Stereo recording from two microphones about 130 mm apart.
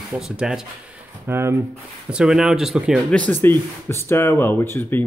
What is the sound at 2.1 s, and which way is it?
Speech, 5° right (ahead or behind).